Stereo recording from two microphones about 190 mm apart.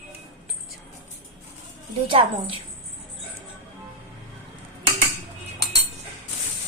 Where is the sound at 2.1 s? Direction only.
25° right (ahead or behind).